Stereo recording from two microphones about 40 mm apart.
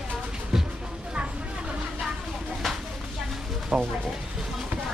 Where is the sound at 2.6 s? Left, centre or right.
Centre.